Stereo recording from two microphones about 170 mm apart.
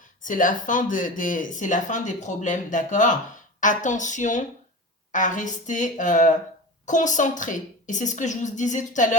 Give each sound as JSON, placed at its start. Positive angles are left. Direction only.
{"t": 0.2, "sound": "speech", "side_deg": 50}